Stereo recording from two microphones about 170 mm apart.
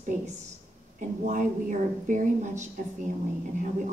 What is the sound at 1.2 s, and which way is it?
A woman's voice, 50° right (ahead or behind).